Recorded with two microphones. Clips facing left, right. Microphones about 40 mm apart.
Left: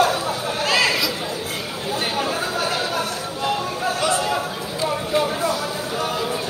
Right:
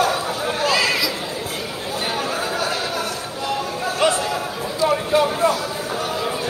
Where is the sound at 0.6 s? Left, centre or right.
Centre.